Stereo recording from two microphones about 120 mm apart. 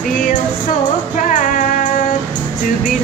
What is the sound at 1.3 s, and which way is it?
Music, 90° left.